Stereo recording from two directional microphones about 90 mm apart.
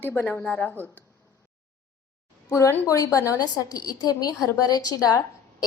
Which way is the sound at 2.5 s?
35° left (ahead or behind).